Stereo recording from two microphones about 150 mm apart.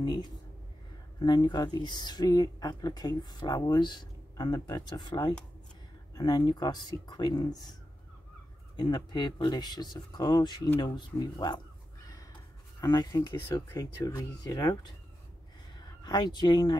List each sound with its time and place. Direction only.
0.0 s speech: 25° left (ahead or behind)
8.7 s speech: 30° left (ahead or behind)
12.8 s speech: 25° left (ahead or behind)
16.0 s speech: 30° left (ahead or behind)